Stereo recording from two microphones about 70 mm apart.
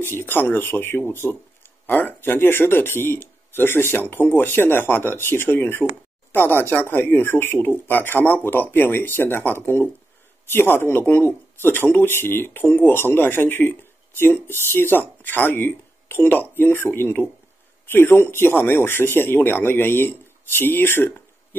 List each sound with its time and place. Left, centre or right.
0.0 s speech: left